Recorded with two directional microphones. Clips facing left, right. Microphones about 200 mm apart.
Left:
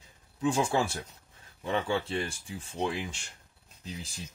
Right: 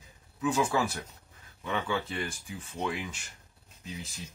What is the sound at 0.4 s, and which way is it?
Speech, 30° left (ahead or behind).